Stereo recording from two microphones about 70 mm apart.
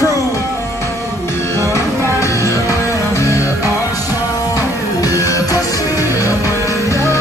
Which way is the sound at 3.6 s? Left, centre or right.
Right.